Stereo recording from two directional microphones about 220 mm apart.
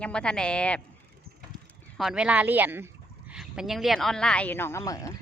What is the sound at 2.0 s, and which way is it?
Speech, 5° right (ahead or behind).